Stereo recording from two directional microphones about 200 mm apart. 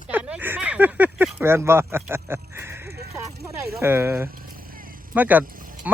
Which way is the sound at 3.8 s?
10° right (ahead or behind).